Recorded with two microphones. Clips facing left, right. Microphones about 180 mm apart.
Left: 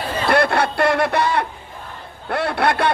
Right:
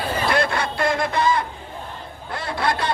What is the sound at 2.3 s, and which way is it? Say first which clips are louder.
Speech: left 5 dB; 65° left (ahead or behind).